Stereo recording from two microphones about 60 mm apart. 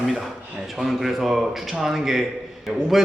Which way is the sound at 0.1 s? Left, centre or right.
Centre.